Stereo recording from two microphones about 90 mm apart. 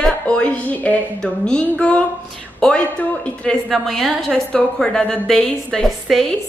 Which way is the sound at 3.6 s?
Centre (ahead or behind).